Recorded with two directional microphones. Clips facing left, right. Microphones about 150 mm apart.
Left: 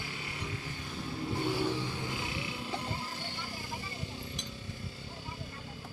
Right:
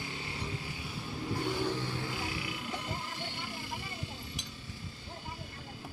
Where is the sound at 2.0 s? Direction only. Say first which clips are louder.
Even; 25° left (ahead or behind).